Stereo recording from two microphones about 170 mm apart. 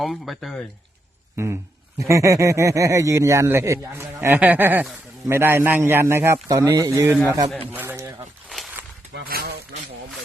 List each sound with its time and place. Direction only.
0.0 s speech: centre (ahead or behind)
2.0 s speech: 20° right (ahead or behind)
9.1 s speech: 60° right (ahead or behind)